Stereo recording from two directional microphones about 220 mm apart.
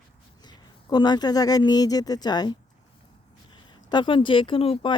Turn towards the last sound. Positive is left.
turn(degrees=25)  # may be behind; listen again after turning